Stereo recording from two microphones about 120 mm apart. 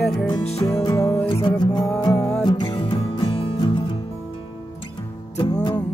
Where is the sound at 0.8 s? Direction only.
35° left (ahead or behind).